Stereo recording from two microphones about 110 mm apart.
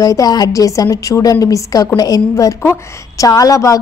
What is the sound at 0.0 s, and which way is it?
A woman's voice, 35° left (ahead or behind).